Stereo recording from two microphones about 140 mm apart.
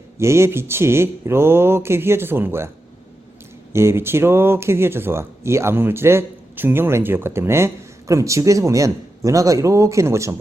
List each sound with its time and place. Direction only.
0.2 s speech: 20° right (ahead or behind)
3.7 s speech: 20° right (ahead or behind)